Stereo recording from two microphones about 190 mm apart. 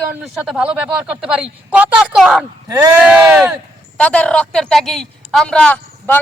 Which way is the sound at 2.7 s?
15° right (ahead or behind).